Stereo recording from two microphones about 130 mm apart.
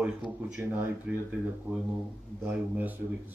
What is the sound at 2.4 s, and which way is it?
Speech, 15° right (ahead or behind).